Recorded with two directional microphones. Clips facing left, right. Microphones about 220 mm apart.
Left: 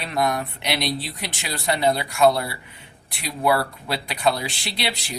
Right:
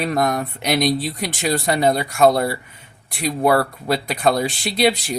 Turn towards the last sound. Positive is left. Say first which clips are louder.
# right 11 dB
turn(degrees=-45)  # may be behind; listen again after turning